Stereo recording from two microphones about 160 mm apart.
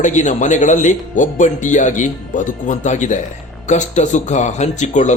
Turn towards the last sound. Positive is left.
turn(degrees=50)  # may be behind; listen again after turning